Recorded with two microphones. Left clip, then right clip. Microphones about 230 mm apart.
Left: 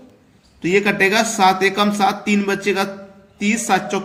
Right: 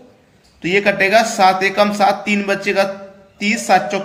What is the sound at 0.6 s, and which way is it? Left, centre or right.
A man's voice, centre.